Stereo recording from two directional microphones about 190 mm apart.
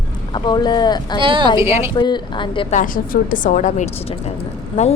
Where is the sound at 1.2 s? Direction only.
25° right (ahead or behind).